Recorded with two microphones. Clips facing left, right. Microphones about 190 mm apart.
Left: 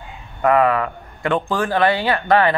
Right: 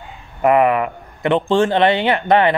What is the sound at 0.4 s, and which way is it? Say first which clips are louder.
A man's voice: right 2 dB; 20° right (ahead or behind).